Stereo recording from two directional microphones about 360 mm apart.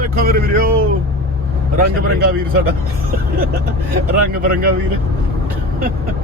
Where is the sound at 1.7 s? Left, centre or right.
Right.